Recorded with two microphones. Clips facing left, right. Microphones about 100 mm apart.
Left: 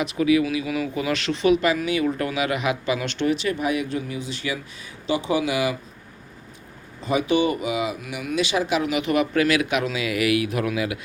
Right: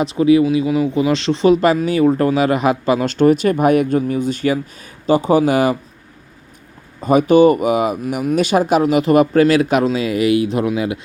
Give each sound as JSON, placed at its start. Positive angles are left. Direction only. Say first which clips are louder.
{"t": 0.0, "sound": "speech", "louder": "right 7 dB", "side_deg": -30}
{"t": 7.0, "sound": "speech", "louder": "right 10 dB", "side_deg": -50}